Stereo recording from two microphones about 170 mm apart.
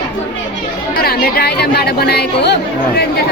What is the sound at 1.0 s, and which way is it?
Speech, 65° left (ahead or behind).